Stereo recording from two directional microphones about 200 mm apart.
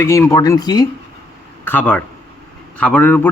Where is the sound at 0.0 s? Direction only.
15° left (ahead or behind).